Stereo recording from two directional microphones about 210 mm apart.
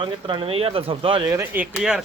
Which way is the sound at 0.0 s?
25° right (ahead or behind).